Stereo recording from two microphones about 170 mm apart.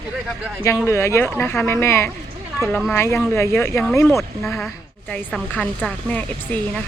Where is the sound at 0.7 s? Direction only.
15° left (ahead or behind).